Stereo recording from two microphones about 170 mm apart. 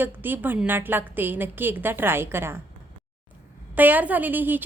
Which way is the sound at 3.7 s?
10° right (ahead or behind).